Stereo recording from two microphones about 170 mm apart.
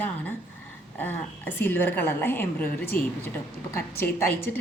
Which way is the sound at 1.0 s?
10° left (ahead or behind).